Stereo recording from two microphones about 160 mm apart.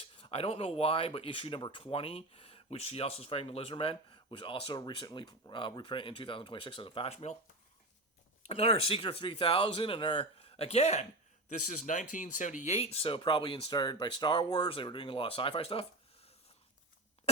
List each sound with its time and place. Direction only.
0.0 s speech: 35° left (ahead or behind)
8.4 s speech: 40° left (ahead or behind)